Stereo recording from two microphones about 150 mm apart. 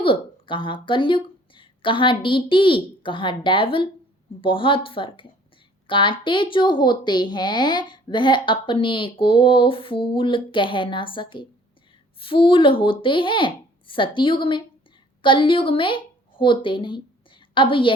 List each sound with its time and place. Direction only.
0.0 s a woman's voice: 35° left (ahead or behind)